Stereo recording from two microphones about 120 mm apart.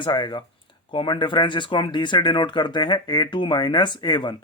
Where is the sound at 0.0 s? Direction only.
40° left (ahead or behind).